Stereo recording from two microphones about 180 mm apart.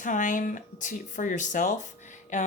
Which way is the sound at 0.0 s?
45° left (ahead or behind).